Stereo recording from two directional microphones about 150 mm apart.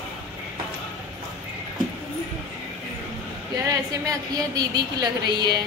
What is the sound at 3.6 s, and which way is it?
A woman's voice, 25° right (ahead or behind).